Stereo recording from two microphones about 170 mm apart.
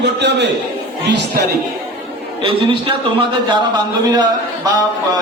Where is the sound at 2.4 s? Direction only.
30° right (ahead or behind).